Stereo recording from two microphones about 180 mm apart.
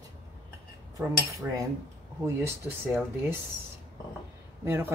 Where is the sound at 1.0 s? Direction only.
20° right (ahead or behind).